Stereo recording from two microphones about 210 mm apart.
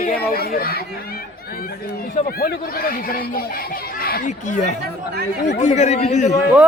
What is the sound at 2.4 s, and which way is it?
A man's voice, 45° left (ahead or behind).